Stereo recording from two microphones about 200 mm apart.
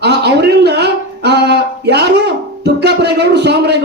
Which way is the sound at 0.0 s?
55° right (ahead or behind).